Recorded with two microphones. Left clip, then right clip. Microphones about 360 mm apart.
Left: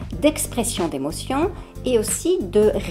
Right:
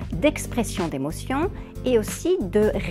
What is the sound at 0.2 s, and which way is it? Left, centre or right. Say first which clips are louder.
Speech: left 2 dB; right.